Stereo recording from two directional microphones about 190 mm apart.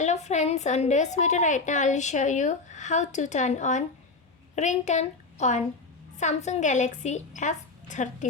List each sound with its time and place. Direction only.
0.0 s a woman's voice: 35° left (ahead or behind)